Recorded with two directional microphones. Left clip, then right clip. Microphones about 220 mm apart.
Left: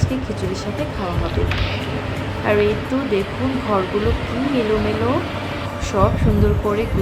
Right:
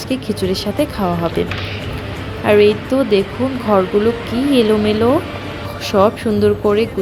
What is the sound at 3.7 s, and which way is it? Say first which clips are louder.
Speech: right 6 dB; 35° right (ahead or behind).